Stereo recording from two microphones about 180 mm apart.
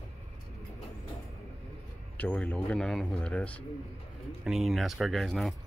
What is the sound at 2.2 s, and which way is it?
A man's voice, 10° left (ahead or behind).